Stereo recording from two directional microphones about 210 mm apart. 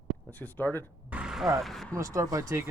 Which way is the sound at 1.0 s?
5° right (ahead or behind).